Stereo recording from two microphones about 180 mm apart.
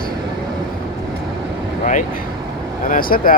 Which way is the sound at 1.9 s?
50° left (ahead or behind).